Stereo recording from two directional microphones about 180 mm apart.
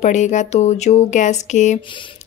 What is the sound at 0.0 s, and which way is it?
Speech, 40° left (ahead or behind).